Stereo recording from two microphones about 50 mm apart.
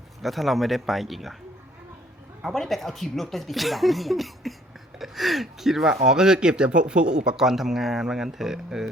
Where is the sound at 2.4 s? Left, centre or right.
Centre.